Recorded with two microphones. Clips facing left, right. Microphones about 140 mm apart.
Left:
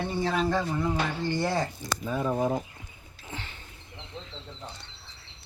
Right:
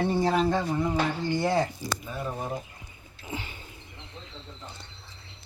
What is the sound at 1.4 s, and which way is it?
Speech, 5° right (ahead or behind).